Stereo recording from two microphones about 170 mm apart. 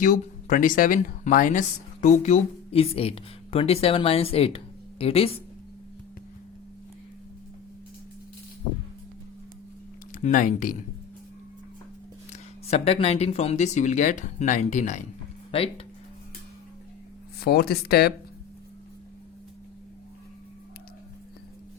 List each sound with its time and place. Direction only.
0.0 s speech: 50° left (ahead or behind); by 5.4 s 35° left (ahead or behind)
10.1 s speech: 45° left (ahead or behind)
12.3 s speech: 40° left (ahead or behind)
15.5 s speech: 35° left (ahead or behind)
17.4 s speech: 65° left (ahead or behind)